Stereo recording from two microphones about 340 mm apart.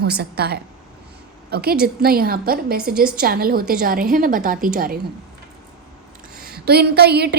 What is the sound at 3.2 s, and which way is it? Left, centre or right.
A woman's voice, right.